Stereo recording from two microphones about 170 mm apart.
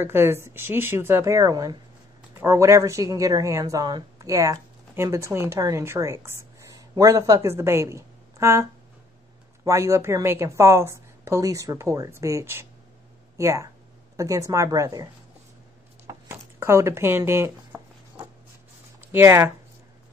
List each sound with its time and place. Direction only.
0.0 s a woman's voice: 15° right (ahead or behind)
9.7 s a woman's voice: 20° right (ahead or behind)
16.1 s a sound: 15° right (ahead or behind)
19.1 s a woman's voice: 10° right (ahead or behind)